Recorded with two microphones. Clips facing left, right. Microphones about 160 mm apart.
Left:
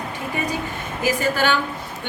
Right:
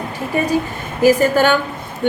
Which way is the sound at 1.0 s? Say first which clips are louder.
Right 8 dB; 50° right (ahead or behind).